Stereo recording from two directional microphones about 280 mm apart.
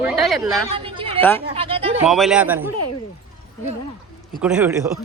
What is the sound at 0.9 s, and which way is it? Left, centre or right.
Chatter, centre.